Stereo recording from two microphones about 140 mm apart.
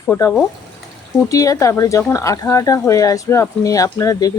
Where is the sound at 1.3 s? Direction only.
25° left (ahead or behind).